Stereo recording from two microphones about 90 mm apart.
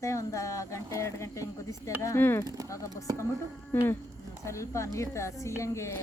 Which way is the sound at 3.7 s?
25° left (ahead or behind).